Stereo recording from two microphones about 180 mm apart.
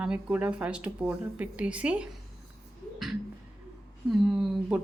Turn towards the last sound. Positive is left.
turn(degrees=0)  # may be behind; listen again after turning